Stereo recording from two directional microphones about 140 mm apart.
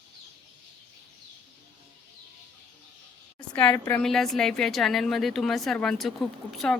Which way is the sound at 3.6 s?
10° left (ahead or behind).